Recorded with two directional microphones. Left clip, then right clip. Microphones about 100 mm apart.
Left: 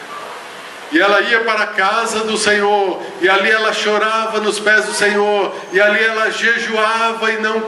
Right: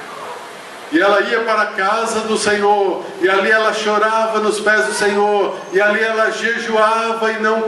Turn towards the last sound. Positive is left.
turn(degrees=20)  # may be behind; listen again after turning